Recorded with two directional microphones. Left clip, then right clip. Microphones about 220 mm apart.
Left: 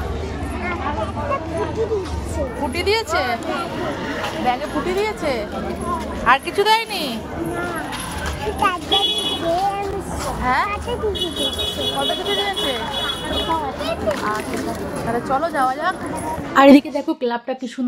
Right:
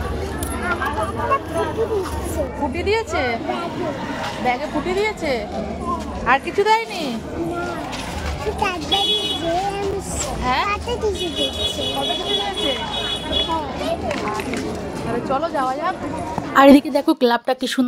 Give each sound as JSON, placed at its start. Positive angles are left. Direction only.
{"t": 2.8, "sound": "speech", "side_deg": 20}
{"t": 4.5, "sound": "speech", "side_deg": 10}
{"t": 10.4, "sound": "speech", "side_deg": 15}
{"t": 15.2, "sound": "a woman's voice", "side_deg": 25}
{"t": 16.5, "sound": "a woman's voice", "side_deg": 0}
{"t": 16.9, "sound": "a woman's voice", "side_deg": -45}